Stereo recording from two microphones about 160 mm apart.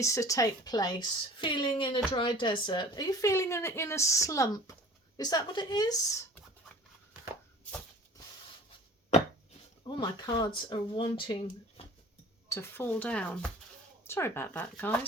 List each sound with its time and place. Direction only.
0.0 s a woman's voice: 20° left (ahead or behind)
9.8 s speech: 25° left (ahead or behind)
12.5 s speech: 15° left (ahead or behind)